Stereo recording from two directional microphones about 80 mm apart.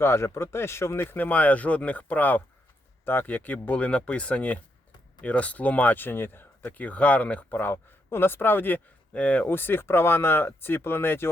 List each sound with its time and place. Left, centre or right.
0.0 s speech: left